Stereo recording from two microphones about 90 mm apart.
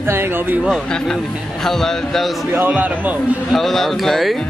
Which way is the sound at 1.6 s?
5° left (ahead or behind).